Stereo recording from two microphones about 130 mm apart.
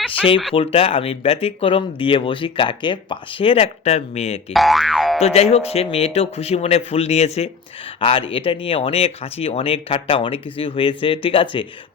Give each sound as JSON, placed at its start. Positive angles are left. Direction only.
{"t": 0.5, "sound": "speech", "side_deg": 50}
{"t": 4.5, "sound": "boing", "side_deg": 0}
{"t": 5.2, "sound": "speech", "side_deg": 55}
{"t": 7.9, "sound": "speech", "side_deg": 45}